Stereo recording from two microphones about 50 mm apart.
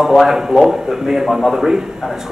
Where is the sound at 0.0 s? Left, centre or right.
Centre.